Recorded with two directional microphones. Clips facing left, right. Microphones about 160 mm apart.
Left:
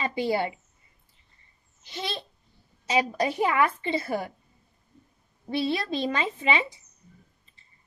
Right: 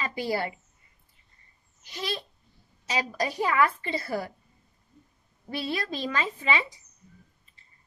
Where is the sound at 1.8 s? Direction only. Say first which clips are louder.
Even; 25° left (ahead or behind).